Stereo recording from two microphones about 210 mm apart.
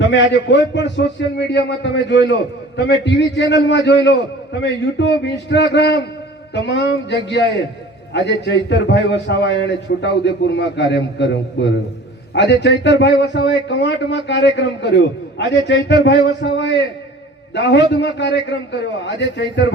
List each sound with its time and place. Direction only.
0.0 s a man's voice: 60° left (ahead or behind)